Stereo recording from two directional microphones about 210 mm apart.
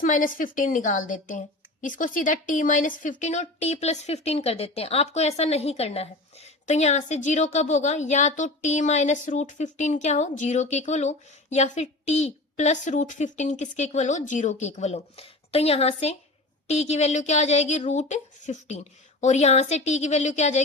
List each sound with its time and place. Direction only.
0.0 s a woman's voice: 40° left (ahead or behind)